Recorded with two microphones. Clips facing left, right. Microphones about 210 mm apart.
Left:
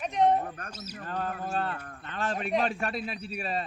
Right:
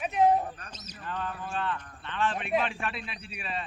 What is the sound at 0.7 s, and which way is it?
Speech, 10° left (ahead or behind).